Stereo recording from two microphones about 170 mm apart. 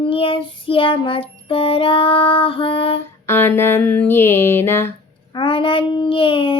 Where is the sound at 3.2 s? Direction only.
15° left (ahead or behind).